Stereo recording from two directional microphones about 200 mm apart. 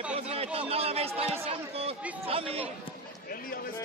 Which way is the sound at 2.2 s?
30° right (ahead or behind).